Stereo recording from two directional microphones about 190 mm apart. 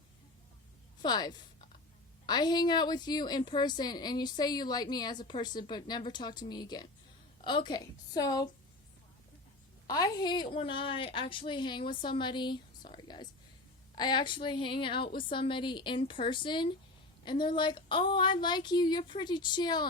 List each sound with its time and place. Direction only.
1.0 s a woman's voice: 20° left (ahead or behind)
9.8 s a woman's voice: 20° left (ahead or behind)